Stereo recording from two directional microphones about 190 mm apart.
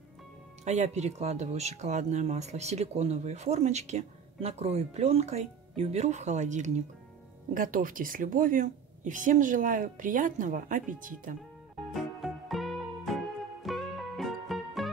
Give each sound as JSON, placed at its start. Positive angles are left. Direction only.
{"t": 0.7, "sound": "a woman's voice", "side_deg": -35}
{"t": 11.9, "sound": "music", "side_deg": 0}